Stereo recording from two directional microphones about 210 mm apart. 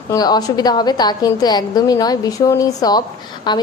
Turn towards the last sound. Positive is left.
turn(degrees=20)  # may be behind; listen again after turning